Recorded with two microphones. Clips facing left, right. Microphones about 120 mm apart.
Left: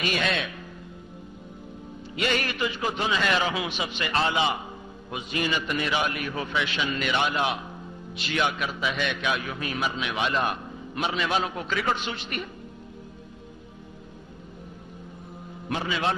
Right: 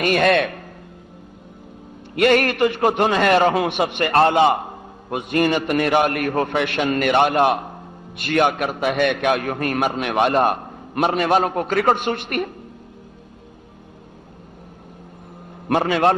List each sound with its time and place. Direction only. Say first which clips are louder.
0.0 s a man's voice: right 11 dB; 55° right (ahead or behind)
2.1 s a man's voice: right 11 dB; 60° right (ahead or behind)
15.7 s a man's voice: right 10 dB; 60° right (ahead or behind)